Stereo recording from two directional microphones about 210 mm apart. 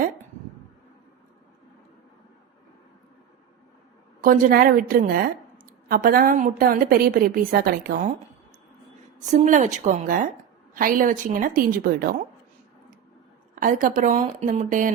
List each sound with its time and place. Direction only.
4.2 s a woman's voice: 40° right (ahead or behind)
9.1 s a woman's voice: 35° right (ahead or behind)
13.6 s a woman's voice: 40° right (ahead or behind)